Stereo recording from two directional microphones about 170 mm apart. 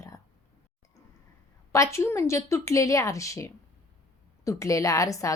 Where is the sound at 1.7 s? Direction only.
15° left (ahead or behind).